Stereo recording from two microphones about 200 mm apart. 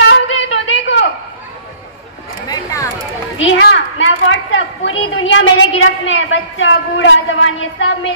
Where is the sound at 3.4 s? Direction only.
65° left (ahead or behind).